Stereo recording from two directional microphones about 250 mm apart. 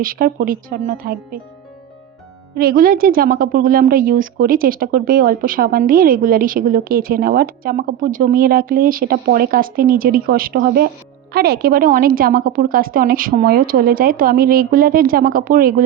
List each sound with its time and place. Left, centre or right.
0.0 s a woman's voice: right
2.6 s a woman's voice: right